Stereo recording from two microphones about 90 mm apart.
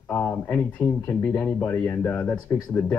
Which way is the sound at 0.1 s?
20° left (ahead or behind).